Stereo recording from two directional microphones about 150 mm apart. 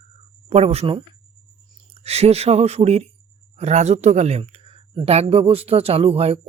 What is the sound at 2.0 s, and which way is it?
Speech, 45° right (ahead or behind).